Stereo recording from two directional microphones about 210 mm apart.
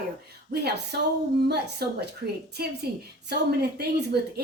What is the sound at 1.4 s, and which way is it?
A woman's voice, 50° right (ahead or behind).